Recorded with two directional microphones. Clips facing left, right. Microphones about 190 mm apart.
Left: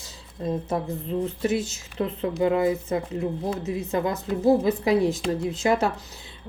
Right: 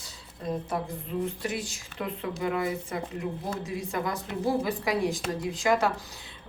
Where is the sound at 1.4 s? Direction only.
25° left (ahead or behind).